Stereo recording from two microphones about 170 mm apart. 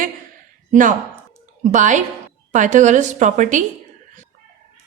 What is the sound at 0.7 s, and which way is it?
A woman's voice, 50° right (ahead or behind).